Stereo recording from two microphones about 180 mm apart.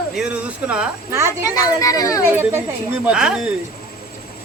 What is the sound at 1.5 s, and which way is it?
Speech, 20° left (ahead or behind).